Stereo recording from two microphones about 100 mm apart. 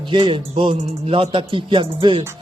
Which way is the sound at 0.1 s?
55° right (ahead or behind).